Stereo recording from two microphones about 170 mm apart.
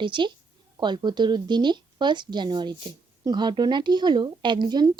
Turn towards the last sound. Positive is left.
turn(degrees=-25)  # may be behind; listen again after turning